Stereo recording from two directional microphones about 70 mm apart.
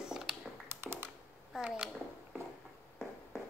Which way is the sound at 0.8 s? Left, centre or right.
Right.